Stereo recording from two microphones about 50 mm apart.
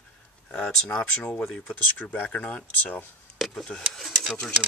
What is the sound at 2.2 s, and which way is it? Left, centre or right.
Speech, left.